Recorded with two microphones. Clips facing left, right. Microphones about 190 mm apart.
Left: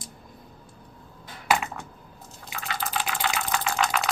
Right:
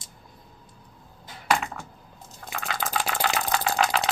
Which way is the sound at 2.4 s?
55° right (ahead or behind).